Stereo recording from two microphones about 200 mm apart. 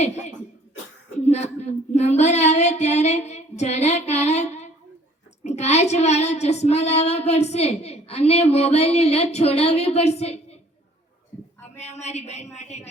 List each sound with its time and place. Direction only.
1.2 s a sound: 35° left (ahead or behind)
5.4 s speech: 35° left (ahead or behind)
11.8 s speech: 35° left (ahead or behind)